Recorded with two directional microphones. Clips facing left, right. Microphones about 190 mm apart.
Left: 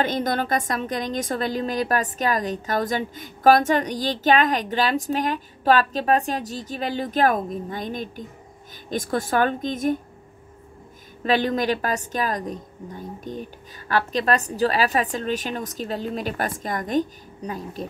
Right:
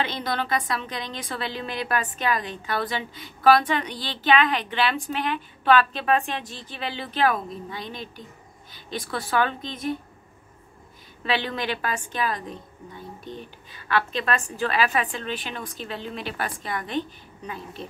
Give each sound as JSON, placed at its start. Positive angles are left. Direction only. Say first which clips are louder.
{"t": 0.0, "sound": "a woman's voice", "louder": "left 5 dB", "side_deg": 45}
{"t": 11.2, "sound": "a woman's voice", "louder": "left 6 dB", "side_deg": 45}